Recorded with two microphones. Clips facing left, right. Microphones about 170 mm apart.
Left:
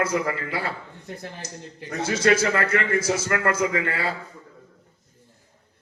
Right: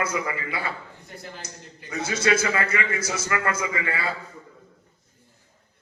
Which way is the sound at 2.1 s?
65° left (ahead or behind).